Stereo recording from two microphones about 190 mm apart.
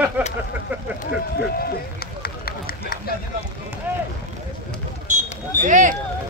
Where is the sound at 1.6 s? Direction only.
55° left (ahead or behind).